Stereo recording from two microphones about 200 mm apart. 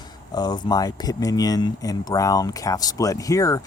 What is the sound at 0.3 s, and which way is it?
Speech, 20° left (ahead or behind).